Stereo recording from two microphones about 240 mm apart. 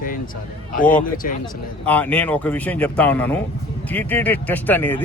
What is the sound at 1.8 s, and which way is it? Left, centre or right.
A man's voice, centre.